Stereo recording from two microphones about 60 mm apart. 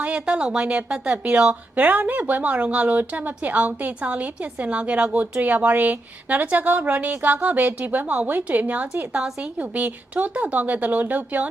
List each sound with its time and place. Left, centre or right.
0.0 s a woman's voice: centre